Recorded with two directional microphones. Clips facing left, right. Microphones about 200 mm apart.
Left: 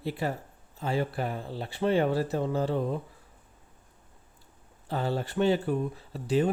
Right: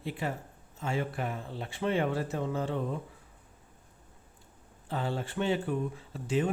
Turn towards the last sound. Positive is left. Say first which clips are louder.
# left 4 dB
turn(degrees=35)  # may be behind; listen again after turning